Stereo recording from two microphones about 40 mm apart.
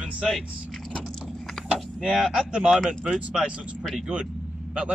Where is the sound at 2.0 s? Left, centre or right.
Centre.